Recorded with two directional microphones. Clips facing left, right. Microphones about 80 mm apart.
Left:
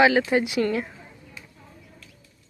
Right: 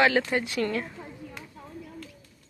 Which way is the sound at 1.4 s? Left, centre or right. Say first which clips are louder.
Right 2 dB; right.